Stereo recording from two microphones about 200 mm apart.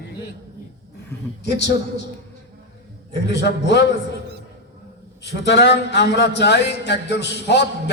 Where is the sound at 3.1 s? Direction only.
60° left (ahead or behind).